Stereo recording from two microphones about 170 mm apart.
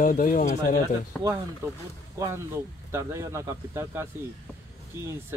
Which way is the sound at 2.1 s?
15° right (ahead or behind).